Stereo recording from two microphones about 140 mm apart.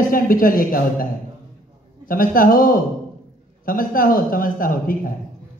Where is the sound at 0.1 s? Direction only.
90° left.